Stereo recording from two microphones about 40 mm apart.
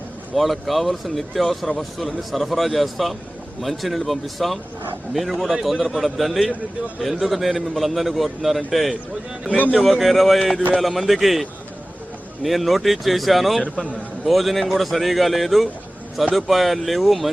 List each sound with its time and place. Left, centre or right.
0.3 s speech: centre
13.7 s a man's voice: left
14.3 s speech: centre